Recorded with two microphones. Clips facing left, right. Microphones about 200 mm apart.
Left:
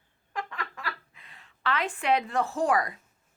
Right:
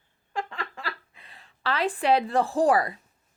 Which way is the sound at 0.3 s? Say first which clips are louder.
Right 3 dB; 30° right (ahead or behind).